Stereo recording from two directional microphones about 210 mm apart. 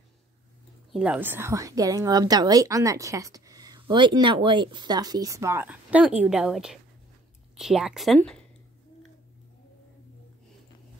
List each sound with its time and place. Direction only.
0.9 s a woman's voice: 5° right (ahead or behind)